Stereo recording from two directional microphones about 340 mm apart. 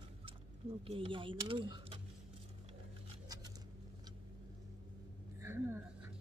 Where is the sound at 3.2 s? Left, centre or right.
Centre.